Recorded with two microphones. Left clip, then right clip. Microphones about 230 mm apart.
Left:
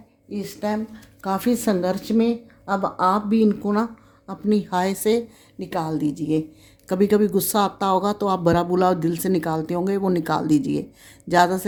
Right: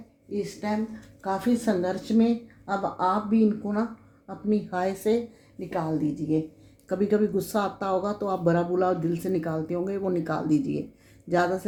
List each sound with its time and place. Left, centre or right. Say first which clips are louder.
0.3 s speech: left 3 dB; left